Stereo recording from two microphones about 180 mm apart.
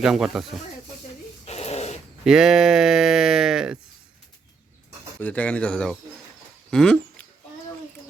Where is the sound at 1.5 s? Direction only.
35° left (ahead or behind).